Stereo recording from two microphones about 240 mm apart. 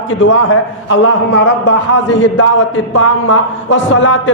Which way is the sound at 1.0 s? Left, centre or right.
Left.